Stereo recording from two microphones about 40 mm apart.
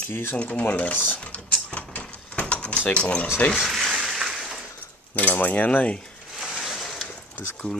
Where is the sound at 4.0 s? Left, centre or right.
Centre.